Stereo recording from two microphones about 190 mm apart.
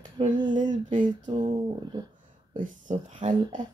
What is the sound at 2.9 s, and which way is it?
Speech, 35° right (ahead or behind).